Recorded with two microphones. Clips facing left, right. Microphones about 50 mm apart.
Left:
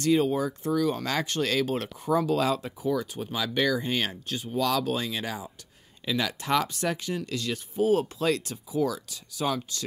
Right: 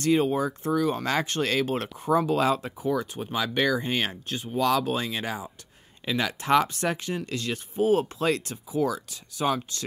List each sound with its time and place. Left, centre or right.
0.0 s speech: right